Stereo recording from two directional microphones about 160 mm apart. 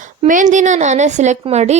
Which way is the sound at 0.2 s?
50° right (ahead or behind).